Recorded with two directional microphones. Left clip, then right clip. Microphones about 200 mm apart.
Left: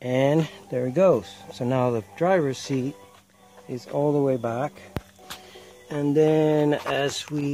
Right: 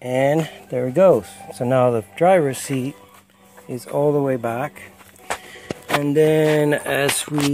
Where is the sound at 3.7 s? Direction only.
10° right (ahead or behind).